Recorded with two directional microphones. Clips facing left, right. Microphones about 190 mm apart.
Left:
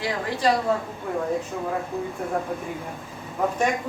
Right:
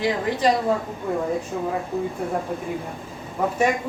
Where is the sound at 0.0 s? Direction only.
20° right (ahead or behind).